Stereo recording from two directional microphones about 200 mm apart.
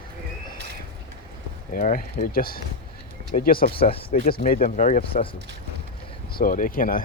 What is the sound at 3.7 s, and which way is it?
Speech, 30° left (ahead or behind).